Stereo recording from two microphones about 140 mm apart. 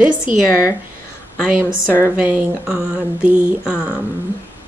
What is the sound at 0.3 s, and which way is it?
Speech, 75° right (ahead or behind).